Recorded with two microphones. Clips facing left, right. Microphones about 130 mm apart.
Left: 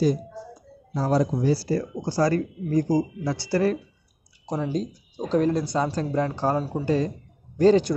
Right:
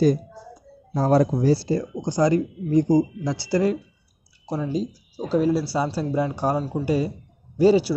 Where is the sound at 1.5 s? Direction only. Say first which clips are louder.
Right 2 dB; 25° right (ahead or behind).